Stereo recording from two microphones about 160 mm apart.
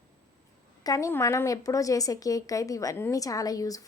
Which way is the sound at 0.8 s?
20° left (ahead or behind).